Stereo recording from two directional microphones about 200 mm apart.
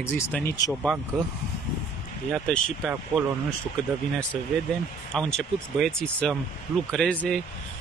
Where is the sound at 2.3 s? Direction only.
5° left (ahead or behind).